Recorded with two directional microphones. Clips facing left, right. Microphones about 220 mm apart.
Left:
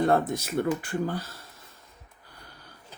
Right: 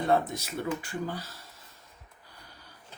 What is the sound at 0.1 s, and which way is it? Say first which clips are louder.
Speech: left 3 dB; 50° left (ahead or behind).